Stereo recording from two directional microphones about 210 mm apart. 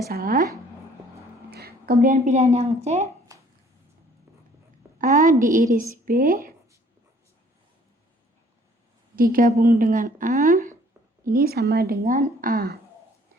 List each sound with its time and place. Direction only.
0.1 s a woman's voice: 45° right (ahead or behind)
1.5 s a woman's voice: 50° right (ahead or behind); by 3.1 s 30° right (ahead or behind)
3.3 s a sound: 15° right (ahead or behind)
4.9 s a woman's voice: 35° right (ahead or behind)
9.1 s a woman's voice: 45° right (ahead or behind)